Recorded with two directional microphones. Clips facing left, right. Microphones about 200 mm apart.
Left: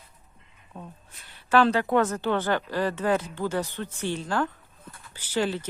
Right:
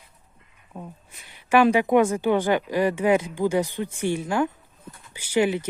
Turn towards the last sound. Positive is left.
turn(degrees=-15)  # may be behind; listen again after turning